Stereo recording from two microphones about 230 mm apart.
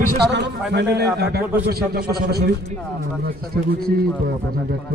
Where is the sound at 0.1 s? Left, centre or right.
Right.